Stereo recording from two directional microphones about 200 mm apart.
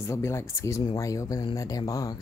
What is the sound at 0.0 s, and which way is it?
Speech, 15° left (ahead or behind).